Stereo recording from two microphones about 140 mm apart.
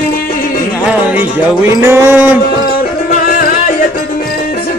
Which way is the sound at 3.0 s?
90° left.